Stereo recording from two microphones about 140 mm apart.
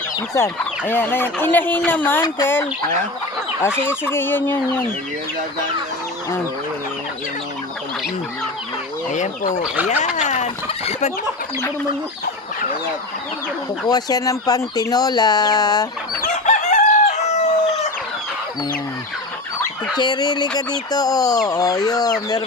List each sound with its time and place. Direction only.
0.3 s speech: 15° left (ahead or behind)
9.1 s speech: 60° left (ahead or behind)
10.0 s fowl: 55° left (ahead or behind)
13.8 s speech: 30° left (ahead or behind)
16.2 s chicken: 60° left (ahead or behind)
20.0 s fowl: 30° left (ahead or behind)
20.6 s speech: 30° left (ahead or behind)